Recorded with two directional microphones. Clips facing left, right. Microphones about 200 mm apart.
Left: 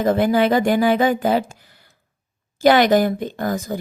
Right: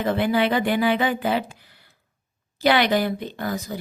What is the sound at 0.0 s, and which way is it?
A woman's voice, 45° left (ahead or behind).